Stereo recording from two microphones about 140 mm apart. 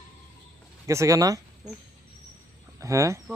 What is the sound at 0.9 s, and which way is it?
Speech, 20° right (ahead or behind).